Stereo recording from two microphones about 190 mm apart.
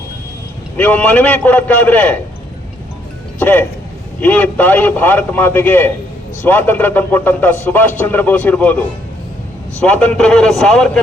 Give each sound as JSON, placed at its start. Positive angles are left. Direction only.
{"t": 0.8, "sound": "speech", "side_deg": 5}
{"t": 3.3, "sound": "speech", "side_deg": 10}
{"t": 9.8, "sound": "speech", "side_deg": 5}